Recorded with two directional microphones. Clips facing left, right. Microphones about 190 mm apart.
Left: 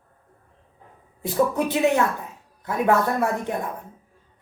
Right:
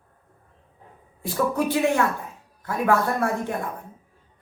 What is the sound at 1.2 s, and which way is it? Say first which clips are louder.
Speech: left 2 dB; 20° left (ahead or behind).